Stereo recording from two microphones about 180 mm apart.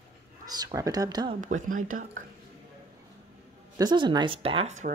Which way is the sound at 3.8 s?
25° right (ahead or behind).